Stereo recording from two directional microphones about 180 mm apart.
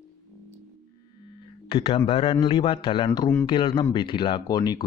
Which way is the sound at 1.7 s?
30° left (ahead or behind).